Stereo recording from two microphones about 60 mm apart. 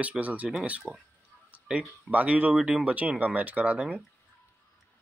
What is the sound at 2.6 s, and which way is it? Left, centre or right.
Speech, centre.